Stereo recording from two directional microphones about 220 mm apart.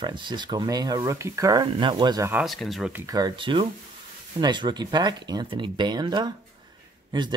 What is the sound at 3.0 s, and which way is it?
Speech, 20° right (ahead or behind).